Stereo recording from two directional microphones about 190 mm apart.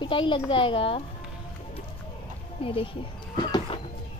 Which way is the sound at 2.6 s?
30° left (ahead or behind).